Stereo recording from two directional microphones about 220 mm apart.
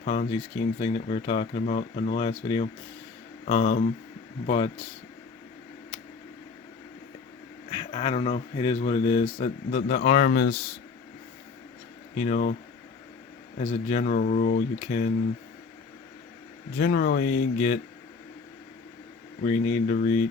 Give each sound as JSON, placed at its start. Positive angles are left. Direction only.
{"t": 0.0, "sound": "speech", "side_deg": 30}
{"t": 7.7, "sound": "speech", "side_deg": 25}
{"t": 12.1, "sound": "speech", "side_deg": 35}
{"t": 13.6, "sound": "speech", "side_deg": 30}
{"t": 16.7, "sound": "speech", "side_deg": 40}
{"t": 19.4, "sound": "speech", "side_deg": 30}